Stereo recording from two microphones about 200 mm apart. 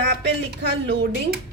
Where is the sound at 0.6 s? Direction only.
60° right (ahead or behind).